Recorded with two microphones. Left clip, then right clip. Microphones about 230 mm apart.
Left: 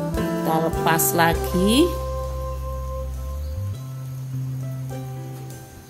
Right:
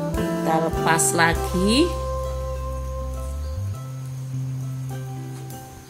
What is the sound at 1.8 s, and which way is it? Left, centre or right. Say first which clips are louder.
Music: left 1 dB; centre.